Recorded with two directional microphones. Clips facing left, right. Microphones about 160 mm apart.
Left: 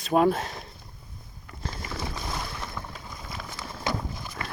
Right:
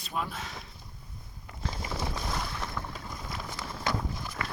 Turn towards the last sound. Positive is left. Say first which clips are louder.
# left 1 dB
turn(degrees=15)  # may be behind; listen again after turning